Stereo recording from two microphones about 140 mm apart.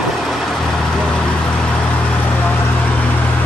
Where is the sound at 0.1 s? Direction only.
Centre (ahead or behind).